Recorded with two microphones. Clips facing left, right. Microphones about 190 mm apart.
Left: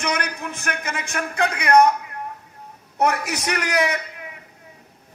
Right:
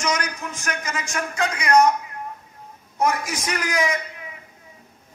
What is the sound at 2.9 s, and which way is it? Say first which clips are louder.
A man's voice: left 1 dB; 65° left (ahead or behind).